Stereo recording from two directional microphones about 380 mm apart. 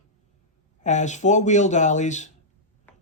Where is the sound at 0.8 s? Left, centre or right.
Centre.